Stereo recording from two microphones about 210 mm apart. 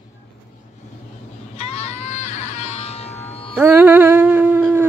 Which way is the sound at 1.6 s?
30° left (ahead or behind).